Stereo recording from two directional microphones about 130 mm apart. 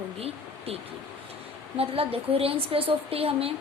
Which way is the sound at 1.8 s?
50° right (ahead or behind).